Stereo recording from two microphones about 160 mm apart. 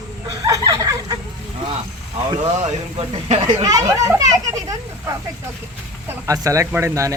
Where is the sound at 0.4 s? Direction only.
20° right (ahead or behind).